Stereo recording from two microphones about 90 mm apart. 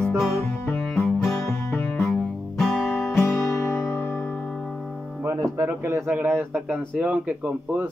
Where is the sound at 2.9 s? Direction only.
35° left (ahead or behind).